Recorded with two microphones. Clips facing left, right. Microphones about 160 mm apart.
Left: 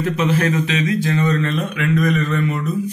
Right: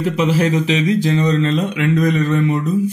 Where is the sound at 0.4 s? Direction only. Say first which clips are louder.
Right 3 dB; 25° right (ahead or behind).